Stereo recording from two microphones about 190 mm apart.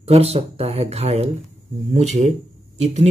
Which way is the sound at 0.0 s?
30° right (ahead or behind).